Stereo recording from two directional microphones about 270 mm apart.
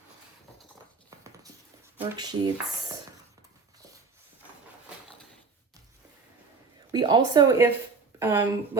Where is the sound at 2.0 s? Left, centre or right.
Centre.